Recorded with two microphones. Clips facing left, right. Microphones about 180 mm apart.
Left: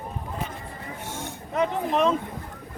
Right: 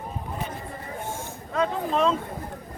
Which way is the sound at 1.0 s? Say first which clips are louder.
Right 1 dB; 80° left.